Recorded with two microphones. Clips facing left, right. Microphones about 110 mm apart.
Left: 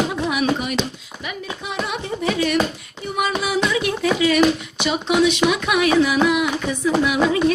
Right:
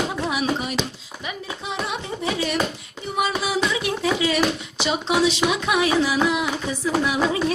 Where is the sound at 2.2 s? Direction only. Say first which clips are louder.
Left 4 dB; 25° right (ahead or behind).